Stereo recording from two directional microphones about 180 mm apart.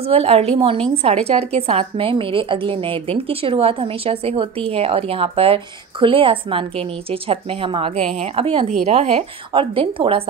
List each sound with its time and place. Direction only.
0.0 s a woman's voice: 35° right (ahead or behind)